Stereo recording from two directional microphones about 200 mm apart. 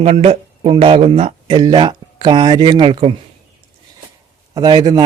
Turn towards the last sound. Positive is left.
turn(degrees=-20)  # may be behind; listen again after turning